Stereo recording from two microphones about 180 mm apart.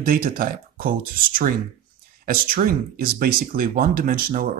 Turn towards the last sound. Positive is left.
turn(degrees=-50)  # may be behind; listen again after turning